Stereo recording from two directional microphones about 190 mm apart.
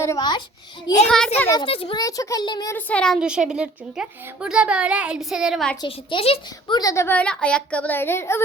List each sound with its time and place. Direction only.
0.0 s a child's voice: 20° left (ahead or behind)
1.0 s a woman's voice: 5° left (ahead or behind)
1.5 s a child's voice: 25° left (ahead or behind)
2.0 s a child's voice: 20° left (ahead or behind)
2.7 s a woman's voice: 5° left (ahead or behind)
5.8 s a woman's voice: 25° left (ahead or behind)